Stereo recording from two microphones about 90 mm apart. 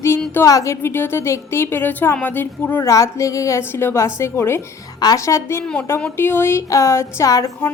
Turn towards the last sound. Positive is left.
turn(degrees=40)  # may be behind; listen again after turning